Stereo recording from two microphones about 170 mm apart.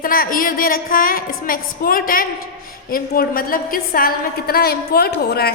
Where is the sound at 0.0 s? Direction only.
55° left (ahead or behind).